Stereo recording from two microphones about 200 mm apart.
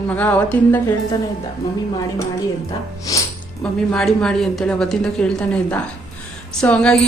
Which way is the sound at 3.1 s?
15° left (ahead or behind).